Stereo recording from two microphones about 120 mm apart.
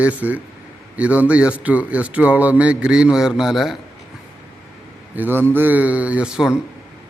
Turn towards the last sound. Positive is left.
turn(degrees=-5)  # may be behind; listen again after turning